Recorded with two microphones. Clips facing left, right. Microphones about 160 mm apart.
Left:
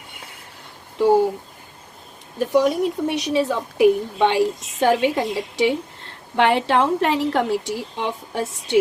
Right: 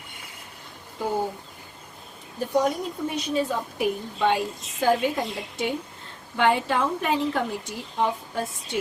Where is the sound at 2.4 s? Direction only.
85° left.